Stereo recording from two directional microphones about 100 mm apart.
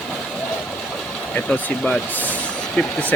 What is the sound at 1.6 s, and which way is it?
Speech, 15° left (ahead or behind).